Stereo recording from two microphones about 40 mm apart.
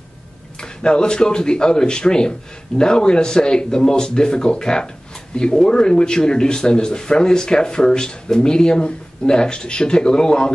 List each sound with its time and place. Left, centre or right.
0.6 s speech: left